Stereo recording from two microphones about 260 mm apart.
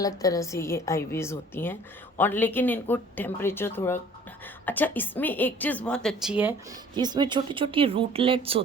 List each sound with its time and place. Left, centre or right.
0.0 s a woman's voice: centre
6.9 s speech: centre